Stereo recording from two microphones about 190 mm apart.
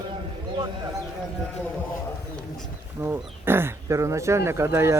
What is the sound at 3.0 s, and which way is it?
Speech, 10° right (ahead or behind).